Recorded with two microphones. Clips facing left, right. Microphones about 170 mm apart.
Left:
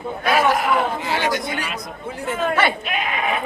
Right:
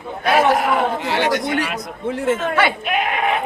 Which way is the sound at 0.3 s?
30° right (ahead or behind).